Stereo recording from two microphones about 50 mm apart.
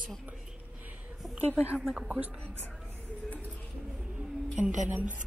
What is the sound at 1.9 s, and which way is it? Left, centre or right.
Speech, right.